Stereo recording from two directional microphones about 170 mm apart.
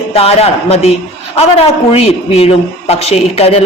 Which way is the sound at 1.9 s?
35° left (ahead or behind).